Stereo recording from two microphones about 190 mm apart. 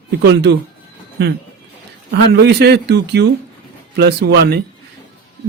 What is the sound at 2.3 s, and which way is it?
Speech, 60° right (ahead or behind).